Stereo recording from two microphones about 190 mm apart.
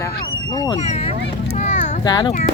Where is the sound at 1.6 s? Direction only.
40° left (ahead or behind).